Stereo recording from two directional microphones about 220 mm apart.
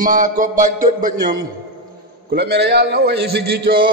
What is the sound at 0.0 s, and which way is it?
A man's voice, 35° right (ahead or behind).